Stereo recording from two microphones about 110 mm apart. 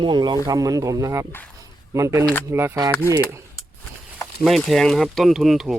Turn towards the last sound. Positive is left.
turn(degrees=0)  # may be behind; listen again after turning